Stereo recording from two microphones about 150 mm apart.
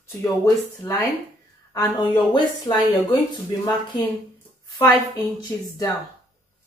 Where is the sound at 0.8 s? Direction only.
20° left (ahead or behind).